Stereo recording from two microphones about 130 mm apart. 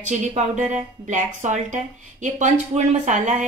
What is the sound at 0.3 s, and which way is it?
Speech, 65° right (ahead or behind).